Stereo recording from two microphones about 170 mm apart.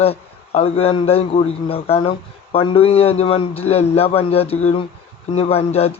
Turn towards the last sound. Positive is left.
turn(degrees=35)  # may be behind; listen again after turning